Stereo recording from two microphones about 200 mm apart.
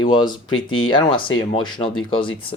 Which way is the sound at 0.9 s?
25° left (ahead or behind).